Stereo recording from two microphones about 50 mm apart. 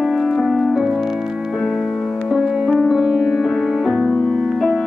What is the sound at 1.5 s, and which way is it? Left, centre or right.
Music, centre.